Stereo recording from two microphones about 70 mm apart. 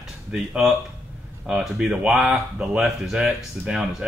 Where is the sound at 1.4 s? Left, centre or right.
Centre.